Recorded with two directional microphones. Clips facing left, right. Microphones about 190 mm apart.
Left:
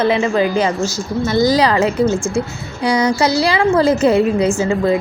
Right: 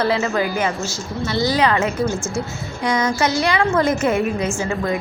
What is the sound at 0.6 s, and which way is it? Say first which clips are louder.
A woman's voice: left 5 dB; 40° left (ahead or behind).